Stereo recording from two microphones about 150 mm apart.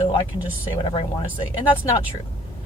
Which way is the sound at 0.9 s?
30° left (ahead or behind).